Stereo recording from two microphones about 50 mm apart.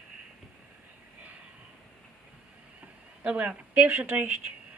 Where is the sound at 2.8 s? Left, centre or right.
Right.